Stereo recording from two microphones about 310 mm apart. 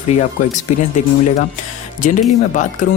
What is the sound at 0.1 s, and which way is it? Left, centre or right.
Speech, left.